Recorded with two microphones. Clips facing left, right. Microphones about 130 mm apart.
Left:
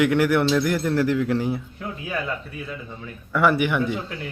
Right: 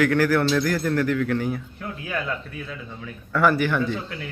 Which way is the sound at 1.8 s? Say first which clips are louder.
Left 1 dB; 5° left (ahead or behind).